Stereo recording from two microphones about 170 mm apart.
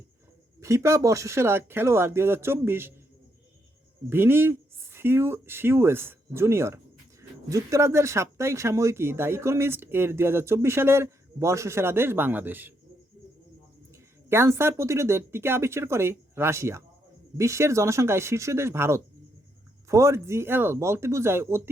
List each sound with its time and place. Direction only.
0.6 s speech: 15° right (ahead or behind)
4.1 s speech: 10° right (ahead or behind)
13.9 s speech: 15° right (ahead or behind)